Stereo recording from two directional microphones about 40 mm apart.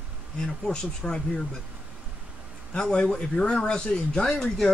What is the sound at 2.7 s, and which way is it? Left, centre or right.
Speech, left.